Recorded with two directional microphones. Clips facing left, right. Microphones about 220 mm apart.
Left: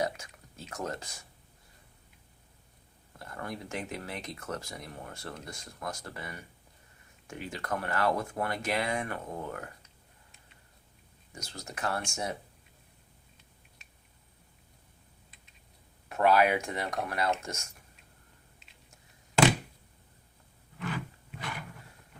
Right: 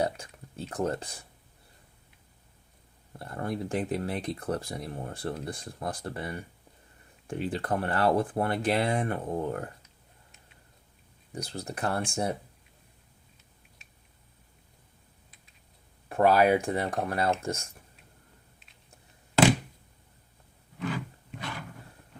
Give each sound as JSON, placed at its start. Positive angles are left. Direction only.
{"t": 0.0, "sound": "speech", "side_deg": -30}
{"t": 3.1, "sound": "speech", "side_deg": -30}
{"t": 11.3, "sound": "speech", "side_deg": -35}
{"t": 16.0, "sound": "speech", "side_deg": -30}